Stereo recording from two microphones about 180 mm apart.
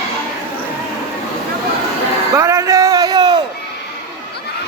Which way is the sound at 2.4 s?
15° right (ahead or behind).